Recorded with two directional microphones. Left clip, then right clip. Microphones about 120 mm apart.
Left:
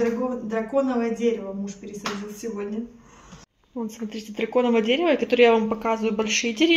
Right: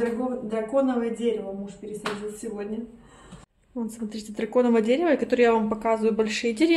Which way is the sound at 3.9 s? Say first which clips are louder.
Left 1 dB; 10° left (ahead or behind).